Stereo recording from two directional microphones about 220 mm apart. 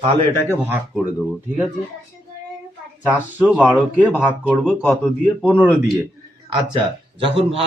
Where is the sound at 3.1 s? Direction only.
5° right (ahead or behind).